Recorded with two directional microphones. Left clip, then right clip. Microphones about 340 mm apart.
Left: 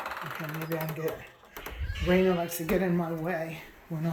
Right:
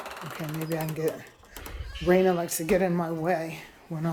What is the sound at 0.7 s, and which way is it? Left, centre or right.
Speech, centre.